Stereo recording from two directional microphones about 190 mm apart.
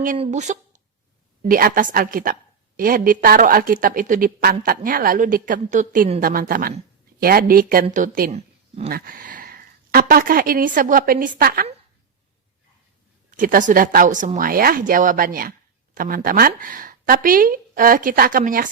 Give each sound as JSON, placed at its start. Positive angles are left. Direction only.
{"t": 0.2, "sound": "a woman's voice", "side_deg": -40}
{"t": 8.3, "sound": "a sound", "side_deg": -35}
{"t": 8.9, "sound": "speech", "side_deg": -50}
{"t": 13.3, "sound": "a woman's voice", "side_deg": -45}